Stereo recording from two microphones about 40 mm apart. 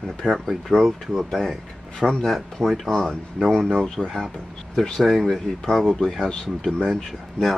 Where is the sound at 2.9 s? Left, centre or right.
Centre.